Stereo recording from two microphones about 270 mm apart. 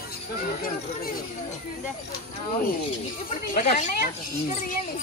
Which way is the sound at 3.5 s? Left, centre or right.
Left.